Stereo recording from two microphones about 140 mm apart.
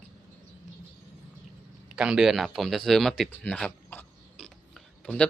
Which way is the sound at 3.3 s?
10° left (ahead or behind).